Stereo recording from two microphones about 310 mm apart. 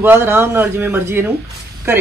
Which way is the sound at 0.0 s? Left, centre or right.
Centre.